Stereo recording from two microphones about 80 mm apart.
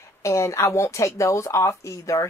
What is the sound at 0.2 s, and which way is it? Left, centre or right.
Speech, left.